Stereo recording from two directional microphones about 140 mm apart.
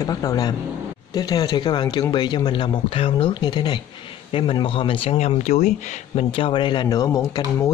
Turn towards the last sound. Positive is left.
turn(degrees=25)  # may be behind; listen again after turning